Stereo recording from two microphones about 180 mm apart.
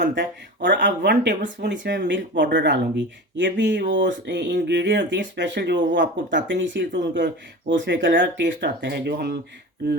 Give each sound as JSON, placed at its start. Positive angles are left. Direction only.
{"t": 0.1, "sound": "speech", "side_deg": -75}